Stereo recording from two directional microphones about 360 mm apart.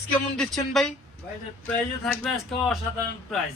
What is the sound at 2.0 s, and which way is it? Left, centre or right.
Speech, centre.